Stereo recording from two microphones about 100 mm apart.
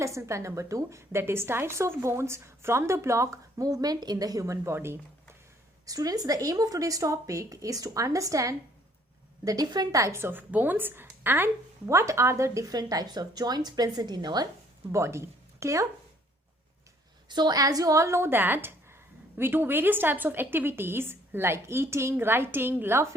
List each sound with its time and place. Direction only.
0.0 s a woman's voice: 30° right (ahead or behind)
5.8 s a woman's voice: 35° right (ahead or behind)
14.9 s a woman's voice: 30° right (ahead or behind)
17.2 s a woman's voice: 45° right (ahead or behind); by 23.0 s 25° right (ahead or behind)